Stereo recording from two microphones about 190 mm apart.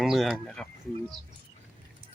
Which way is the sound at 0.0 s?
Centre (ahead or behind).